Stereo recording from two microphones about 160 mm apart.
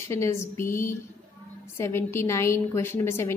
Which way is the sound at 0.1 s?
15° left (ahead or behind).